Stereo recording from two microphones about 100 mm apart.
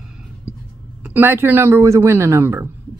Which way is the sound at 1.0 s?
20° right (ahead or behind).